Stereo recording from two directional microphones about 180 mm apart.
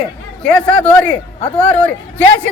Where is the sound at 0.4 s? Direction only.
5° left (ahead or behind).